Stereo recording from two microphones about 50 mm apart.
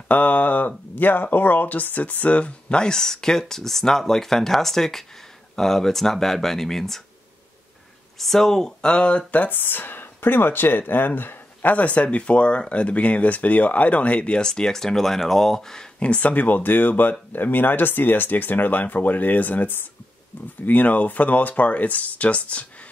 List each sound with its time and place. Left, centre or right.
0.1 s speech: left; by 7.0 s centre
8.2 s speech: centre
9.3 s speech: left; by 15.9 s centre
16.0 s speech: left